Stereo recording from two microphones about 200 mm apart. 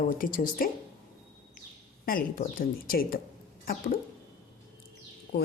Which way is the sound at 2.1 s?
45° left (ahead or behind).